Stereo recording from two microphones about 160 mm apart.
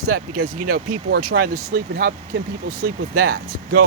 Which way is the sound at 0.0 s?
65° right (ahead or behind).